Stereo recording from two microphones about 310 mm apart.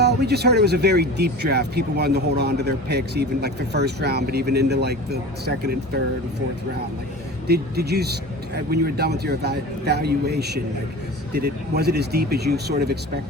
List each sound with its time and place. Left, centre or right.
0.0 s speech: right
7.4 s speech: right